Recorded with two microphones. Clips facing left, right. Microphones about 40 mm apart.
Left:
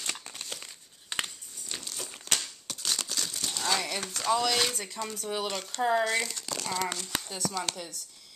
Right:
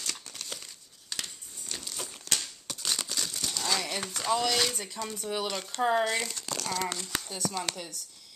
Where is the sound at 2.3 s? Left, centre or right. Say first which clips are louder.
Left 1 dB; centre.